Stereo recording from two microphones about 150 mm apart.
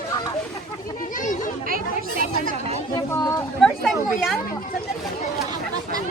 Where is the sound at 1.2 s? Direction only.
60° left (ahead or behind).